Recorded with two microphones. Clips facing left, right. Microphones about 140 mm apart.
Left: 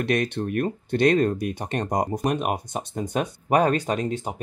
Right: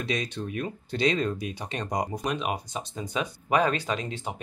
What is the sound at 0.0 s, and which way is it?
Speech, 60° left (ahead or behind).